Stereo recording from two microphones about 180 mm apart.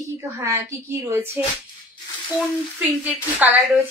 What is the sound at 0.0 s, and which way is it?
A woman's voice, 15° right (ahead or behind).